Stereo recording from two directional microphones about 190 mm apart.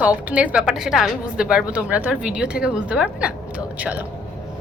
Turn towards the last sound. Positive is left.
turn(degrees=-5)  # may be behind; listen again after turning